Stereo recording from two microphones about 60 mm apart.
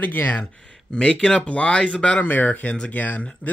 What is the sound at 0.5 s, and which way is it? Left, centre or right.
Speech, centre.